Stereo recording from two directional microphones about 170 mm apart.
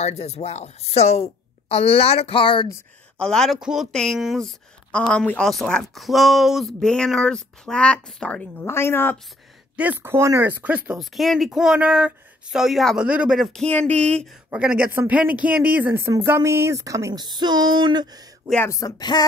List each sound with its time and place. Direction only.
0.0 s a woman's voice: 40° left (ahead or behind)
3.2 s a woman's voice: 5° left (ahead or behind)
9.8 s speech: 10° right (ahead or behind)
18.5 s speech: 15° left (ahead or behind)